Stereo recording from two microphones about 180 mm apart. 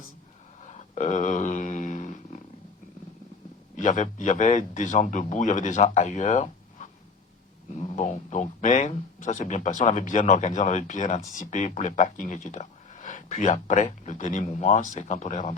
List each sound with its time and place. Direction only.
0.6 s a sound: 40° left (ahead or behind)
3.8 s speech: 45° left (ahead or behind)
7.9 s speech: 40° left (ahead or behind)